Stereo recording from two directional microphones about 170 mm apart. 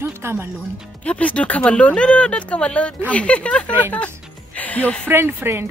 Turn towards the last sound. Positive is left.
turn(degrees=-15)  # may be behind; listen again after turning